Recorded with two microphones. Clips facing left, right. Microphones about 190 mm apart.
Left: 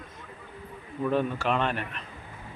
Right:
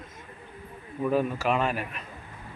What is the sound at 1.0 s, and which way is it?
A man's voice, 5° right (ahead or behind).